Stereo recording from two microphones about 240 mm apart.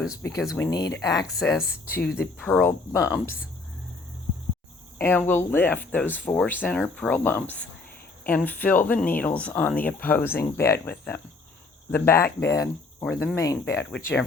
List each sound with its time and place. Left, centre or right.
0.2 s speech: centre
2.0 s speech: left
2.4 s speech: centre
4.9 s speech: centre